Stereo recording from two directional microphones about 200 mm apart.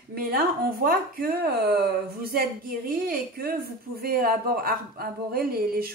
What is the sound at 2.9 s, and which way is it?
A woman's voice, 45° right (ahead or behind).